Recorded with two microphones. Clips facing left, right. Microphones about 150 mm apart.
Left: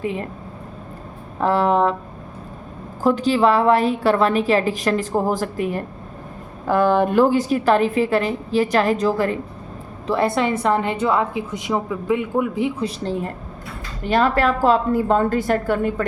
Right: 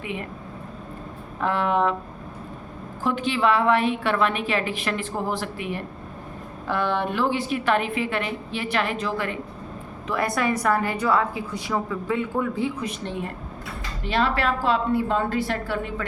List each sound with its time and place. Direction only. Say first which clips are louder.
0.0 s a woman's voice: left 7 dB; 35° left (ahead or behind)
1.4 s a woman's voice: left 5 dB; 35° left (ahead or behind)
3.0 s a woman's voice: left 7 dB; 40° left (ahead or behind); by 12.7 s 15° left (ahead or behind)
12.8 s a woman's voice: left 6 dB; 35° left (ahead or behind); by 16.0 s 50° left (ahead or behind)